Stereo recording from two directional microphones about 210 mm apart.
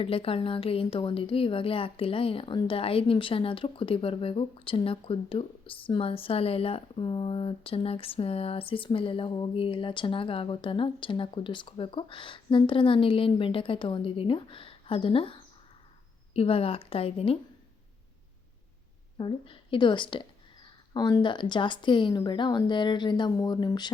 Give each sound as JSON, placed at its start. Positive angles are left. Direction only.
{"t": 0.0, "sound": "speech", "side_deg": 25}
{"t": 19.1, "sound": "speech", "side_deg": 25}